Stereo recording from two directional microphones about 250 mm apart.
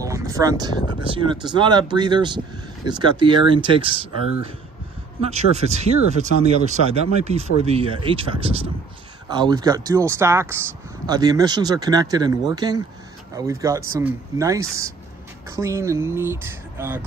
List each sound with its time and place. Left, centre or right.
0.0 s speech: centre
5.2 s speech: right; by 17.0 s centre